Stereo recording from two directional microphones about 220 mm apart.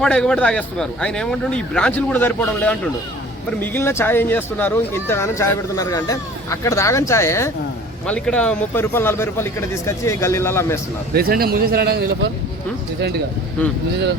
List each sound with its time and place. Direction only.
0.0 s a man's voice: 5° left (ahead or behind)
11.1 s speech: 45° right (ahead or behind)